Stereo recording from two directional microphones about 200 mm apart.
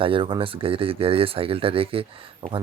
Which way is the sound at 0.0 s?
25° right (ahead or behind).